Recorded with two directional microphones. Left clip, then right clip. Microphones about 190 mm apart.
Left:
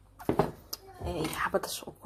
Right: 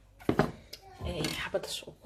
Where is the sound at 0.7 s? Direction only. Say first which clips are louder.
Left 3 dB; 15° left (ahead or behind).